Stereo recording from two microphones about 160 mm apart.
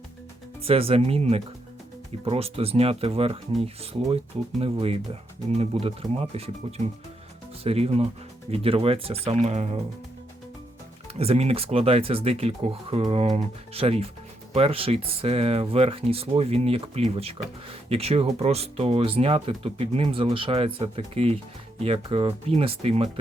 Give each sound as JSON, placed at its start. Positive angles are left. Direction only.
{"t": 0.6, "sound": "speech", "side_deg": -35}
{"t": 4.6, "sound": "speech", "side_deg": -40}
{"t": 11.1, "sound": "speech", "side_deg": -40}